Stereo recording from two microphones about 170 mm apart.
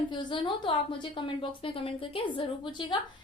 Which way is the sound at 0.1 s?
25° left (ahead or behind).